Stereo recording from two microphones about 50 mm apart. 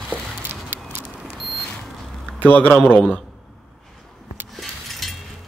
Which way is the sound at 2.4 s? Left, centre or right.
Left.